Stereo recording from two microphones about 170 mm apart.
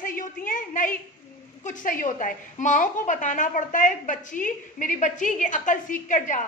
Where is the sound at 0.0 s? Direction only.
50° left (ahead or behind).